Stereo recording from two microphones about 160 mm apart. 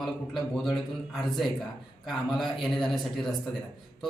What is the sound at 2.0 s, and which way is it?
A man's voice, centre (ahead or behind).